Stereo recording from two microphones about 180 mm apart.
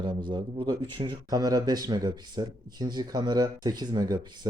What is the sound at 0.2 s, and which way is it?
Speech, 25° right (ahead or behind).